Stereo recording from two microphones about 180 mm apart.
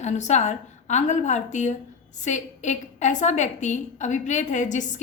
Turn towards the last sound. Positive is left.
turn(degrees=45)  # may be behind; listen again after turning